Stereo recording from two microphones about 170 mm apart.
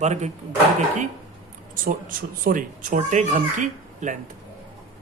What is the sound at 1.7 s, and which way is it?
Speech, 55° right (ahead or behind).